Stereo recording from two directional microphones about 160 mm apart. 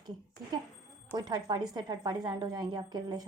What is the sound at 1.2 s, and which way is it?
A woman's voice, 25° right (ahead or behind).